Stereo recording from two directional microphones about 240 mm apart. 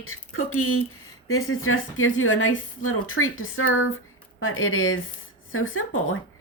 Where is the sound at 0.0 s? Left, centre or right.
Left.